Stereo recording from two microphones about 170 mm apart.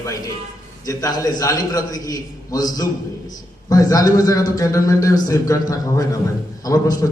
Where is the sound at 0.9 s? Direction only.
20° left (ahead or behind).